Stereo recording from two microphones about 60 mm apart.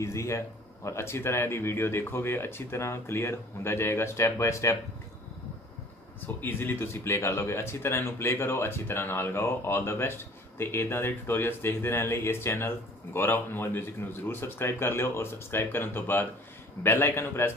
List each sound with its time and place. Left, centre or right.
0.0 s a man's voice: left
6.2 s speech: left